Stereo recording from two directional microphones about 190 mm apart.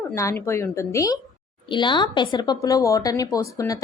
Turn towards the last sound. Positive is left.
turn(degrees=15)  # may be behind; listen again after turning